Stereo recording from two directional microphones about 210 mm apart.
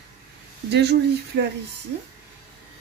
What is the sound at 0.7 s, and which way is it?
Speech, 50° right (ahead or behind).